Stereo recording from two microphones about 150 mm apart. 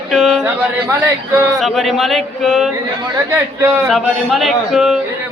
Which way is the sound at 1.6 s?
Centre (ahead or behind).